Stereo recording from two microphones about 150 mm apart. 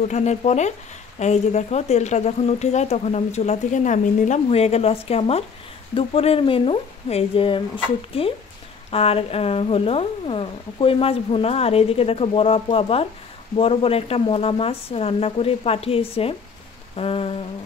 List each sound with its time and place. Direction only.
0.1 s speech: 50° left (ahead or behind)